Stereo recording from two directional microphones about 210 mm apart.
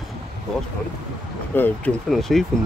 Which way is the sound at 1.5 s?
10° left (ahead or behind).